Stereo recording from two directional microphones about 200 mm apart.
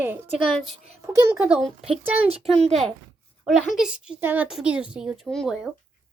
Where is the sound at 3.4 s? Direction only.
Centre (ahead or behind).